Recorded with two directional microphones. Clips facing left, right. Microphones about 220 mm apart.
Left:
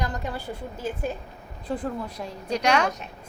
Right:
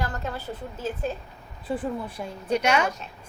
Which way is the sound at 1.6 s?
5° right (ahead or behind).